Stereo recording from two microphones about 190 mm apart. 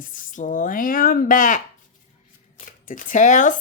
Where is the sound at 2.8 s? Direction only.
45° left (ahead or behind).